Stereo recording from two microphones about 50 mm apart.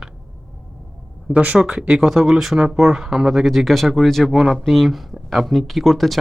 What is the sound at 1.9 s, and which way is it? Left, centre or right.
Speech, centre.